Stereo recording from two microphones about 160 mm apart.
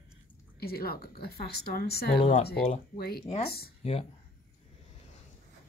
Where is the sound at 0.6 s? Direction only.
75° left (ahead or behind).